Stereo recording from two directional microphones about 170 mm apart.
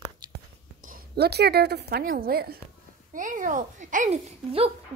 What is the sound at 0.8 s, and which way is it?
A woman's voice, 55° right (ahead or behind).